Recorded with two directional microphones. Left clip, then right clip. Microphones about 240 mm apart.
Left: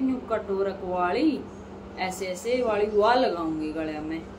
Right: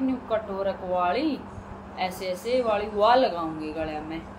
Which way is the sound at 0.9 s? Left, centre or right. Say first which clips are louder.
Left 1 dB; centre.